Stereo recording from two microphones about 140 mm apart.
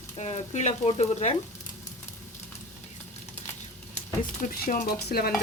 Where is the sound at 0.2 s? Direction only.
55° left (ahead or behind).